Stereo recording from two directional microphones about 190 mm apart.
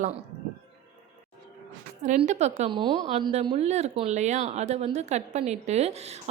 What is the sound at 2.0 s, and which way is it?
Speech, 40° right (ahead or behind).